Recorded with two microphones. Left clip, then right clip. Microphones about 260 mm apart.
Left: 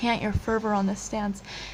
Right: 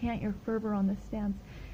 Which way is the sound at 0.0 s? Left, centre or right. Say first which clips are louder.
Left 9 dB; centre.